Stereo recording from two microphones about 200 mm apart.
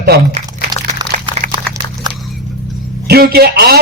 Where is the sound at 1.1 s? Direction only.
35° right (ahead or behind).